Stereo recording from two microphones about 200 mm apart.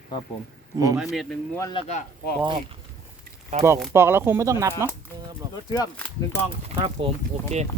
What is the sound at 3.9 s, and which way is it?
Speech, 10° right (ahead or behind).